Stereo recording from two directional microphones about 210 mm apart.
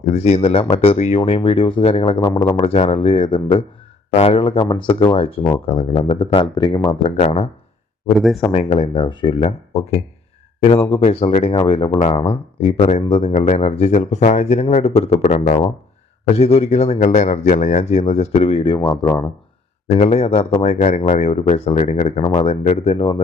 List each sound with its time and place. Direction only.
0.0 s speech: 30° left (ahead or behind)
7.2 s speech: 30° left (ahead or behind)
8.5 s speech: 30° left (ahead or behind)
19.9 s speech: 30° left (ahead or behind)